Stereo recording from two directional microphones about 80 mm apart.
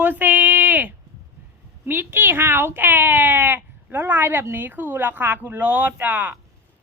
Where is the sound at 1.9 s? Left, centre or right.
Right.